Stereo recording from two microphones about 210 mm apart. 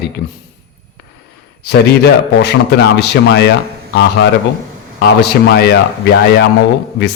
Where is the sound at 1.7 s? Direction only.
50° left (ahead or behind).